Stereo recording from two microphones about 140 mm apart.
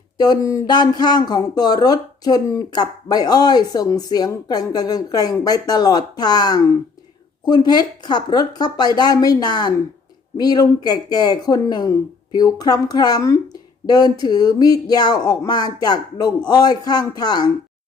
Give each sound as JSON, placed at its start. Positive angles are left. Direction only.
{"t": 0.2, "sound": "speech", "side_deg": 25}